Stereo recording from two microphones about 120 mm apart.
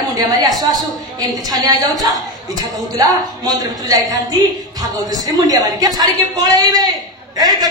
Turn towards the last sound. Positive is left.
turn(degrees=-35)  # may be behind; listen again after turning